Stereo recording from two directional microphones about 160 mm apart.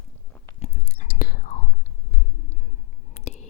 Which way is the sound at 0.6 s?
50° left (ahead or behind).